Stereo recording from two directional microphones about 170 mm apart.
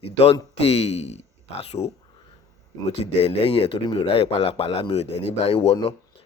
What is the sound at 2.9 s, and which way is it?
A man's voice, 35° left (ahead or behind).